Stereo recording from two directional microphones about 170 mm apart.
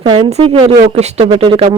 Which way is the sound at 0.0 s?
40° right (ahead or behind).